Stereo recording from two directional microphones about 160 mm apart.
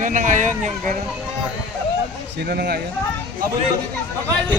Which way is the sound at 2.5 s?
85° right.